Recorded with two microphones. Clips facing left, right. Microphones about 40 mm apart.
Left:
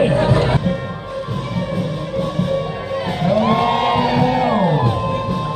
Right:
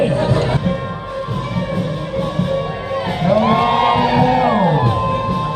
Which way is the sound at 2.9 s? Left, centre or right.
Centre.